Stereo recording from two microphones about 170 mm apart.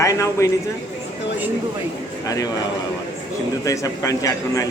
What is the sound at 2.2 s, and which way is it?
Speech, 20° left (ahead or behind).